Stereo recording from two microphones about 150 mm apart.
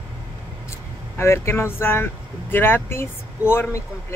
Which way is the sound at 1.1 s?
15° left (ahead or behind).